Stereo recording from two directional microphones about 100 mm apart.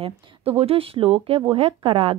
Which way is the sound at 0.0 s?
80° right.